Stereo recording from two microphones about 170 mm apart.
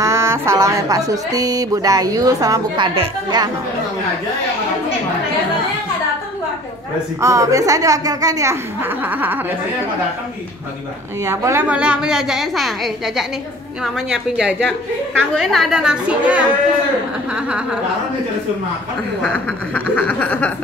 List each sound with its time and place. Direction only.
0.0 s speech: 15° right (ahead or behind)
7.2 s speech: 20° right (ahead or behind)
11.2 s a woman's voice: 15° right (ahead or behind)
19.2 s a sound: 5° left (ahead or behind)